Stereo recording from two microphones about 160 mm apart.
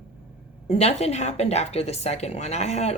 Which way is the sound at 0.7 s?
40° left (ahead or behind).